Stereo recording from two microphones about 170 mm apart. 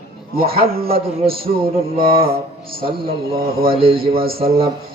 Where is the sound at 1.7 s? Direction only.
35° right (ahead or behind).